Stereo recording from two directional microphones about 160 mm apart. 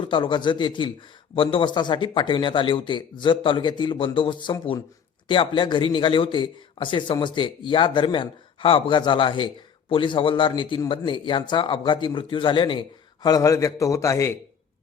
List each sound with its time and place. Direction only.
0.0 s a man's voice: 30° left (ahead or behind)